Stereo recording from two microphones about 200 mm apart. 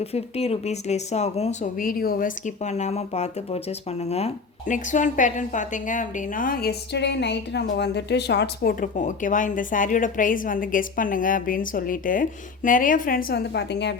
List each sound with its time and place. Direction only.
0.0 s speech: 30° left (ahead or behind); by 8.7 s 55° left (ahead or behind)
8.8 s a woman's voice: 40° left (ahead or behind); by 13.9 s 60° left (ahead or behind)